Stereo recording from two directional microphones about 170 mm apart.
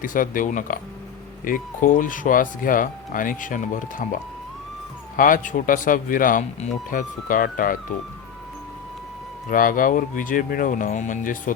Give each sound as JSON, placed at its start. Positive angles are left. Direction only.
{"t": 0.0, "sound": "speech", "side_deg": 55}
{"t": 9.5, "sound": "speech", "side_deg": 55}